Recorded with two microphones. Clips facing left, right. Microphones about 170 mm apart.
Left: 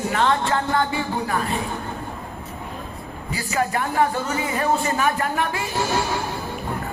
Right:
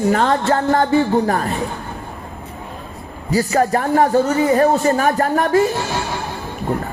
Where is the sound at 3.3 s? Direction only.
40° right (ahead or behind).